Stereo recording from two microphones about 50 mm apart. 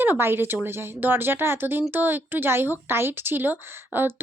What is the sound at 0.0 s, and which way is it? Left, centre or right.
Speech, right.